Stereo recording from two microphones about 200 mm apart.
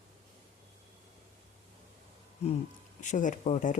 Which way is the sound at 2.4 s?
30° left (ahead or behind).